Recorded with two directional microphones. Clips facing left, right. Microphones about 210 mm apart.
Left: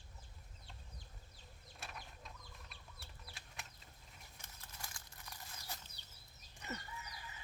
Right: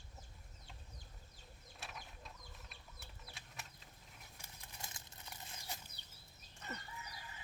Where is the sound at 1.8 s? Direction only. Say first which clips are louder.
Even; centre (ahead or behind).